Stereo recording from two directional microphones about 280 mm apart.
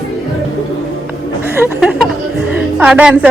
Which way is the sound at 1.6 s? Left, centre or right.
Centre.